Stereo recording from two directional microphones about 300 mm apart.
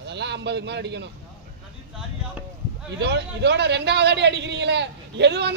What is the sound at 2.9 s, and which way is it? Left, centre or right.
A man's voice, right.